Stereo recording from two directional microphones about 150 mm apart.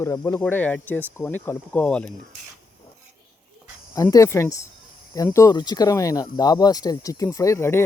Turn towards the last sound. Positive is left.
turn(degrees=15)  # may be behind; listen again after turning